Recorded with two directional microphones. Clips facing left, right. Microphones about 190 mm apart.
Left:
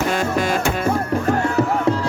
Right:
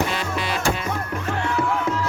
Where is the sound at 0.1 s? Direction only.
45° left (ahead or behind).